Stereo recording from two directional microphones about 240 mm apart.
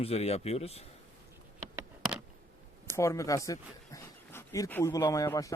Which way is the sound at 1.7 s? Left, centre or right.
Centre.